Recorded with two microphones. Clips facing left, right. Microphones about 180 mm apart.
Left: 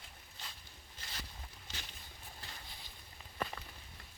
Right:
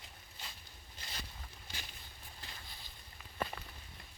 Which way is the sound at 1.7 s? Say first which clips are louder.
Even; 10° right (ahead or behind).